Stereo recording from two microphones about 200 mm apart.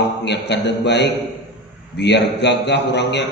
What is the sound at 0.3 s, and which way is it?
A man's voice, 60° left (ahead or behind).